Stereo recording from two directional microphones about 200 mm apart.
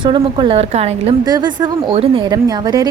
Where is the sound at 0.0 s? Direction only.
25° right (ahead or behind).